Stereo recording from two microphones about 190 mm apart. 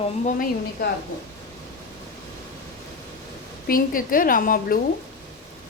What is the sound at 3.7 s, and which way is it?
A woman's voice, 45° left (ahead or behind).